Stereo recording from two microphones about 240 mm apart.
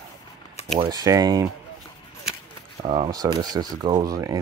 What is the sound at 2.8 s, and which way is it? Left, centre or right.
Speech, centre.